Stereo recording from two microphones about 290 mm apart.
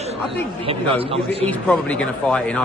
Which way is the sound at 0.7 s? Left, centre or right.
Centre.